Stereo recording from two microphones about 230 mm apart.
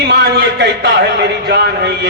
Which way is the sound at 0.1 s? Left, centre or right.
Right.